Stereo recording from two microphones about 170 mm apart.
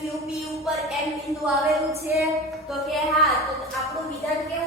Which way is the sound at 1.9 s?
15° right (ahead or behind).